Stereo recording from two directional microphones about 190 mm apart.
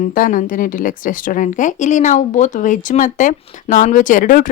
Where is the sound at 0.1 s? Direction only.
45° left (ahead or behind).